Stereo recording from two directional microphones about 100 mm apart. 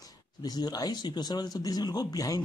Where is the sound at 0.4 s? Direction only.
40° left (ahead or behind).